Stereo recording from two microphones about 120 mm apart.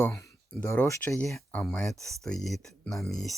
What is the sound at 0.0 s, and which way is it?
Speech, 25° left (ahead or behind).